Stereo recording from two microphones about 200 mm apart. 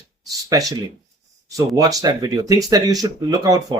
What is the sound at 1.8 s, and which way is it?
A man's voice, 15° right (ahead or behind).